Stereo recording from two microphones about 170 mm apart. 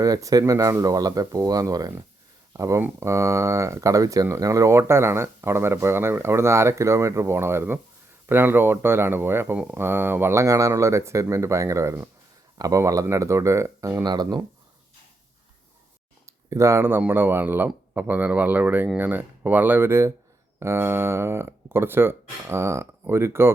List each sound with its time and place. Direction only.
0.0 s speech: 20° right (ahead or behind)
16.2 s speech: 15° right (ahead or behind)